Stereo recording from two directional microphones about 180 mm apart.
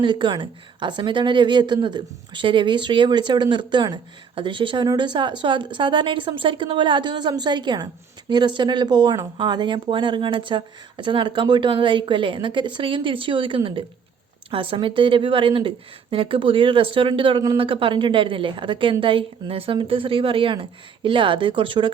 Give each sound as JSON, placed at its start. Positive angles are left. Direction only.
{"t": 0.0, "sound": "a woman's voice", "side_deg": -25}